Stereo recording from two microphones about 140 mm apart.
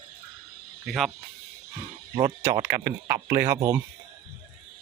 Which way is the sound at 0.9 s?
Centre (ahead or behind).